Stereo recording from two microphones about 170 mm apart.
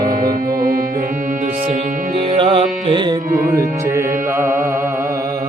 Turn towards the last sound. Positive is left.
turn(degrees=-15)  # may be behind; listen again after turning